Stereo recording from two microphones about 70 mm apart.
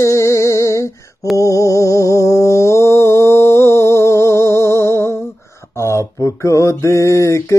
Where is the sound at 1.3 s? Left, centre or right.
Left.